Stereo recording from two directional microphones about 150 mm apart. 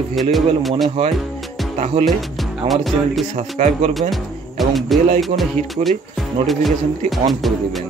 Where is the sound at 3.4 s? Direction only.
50° right (ahead or behind).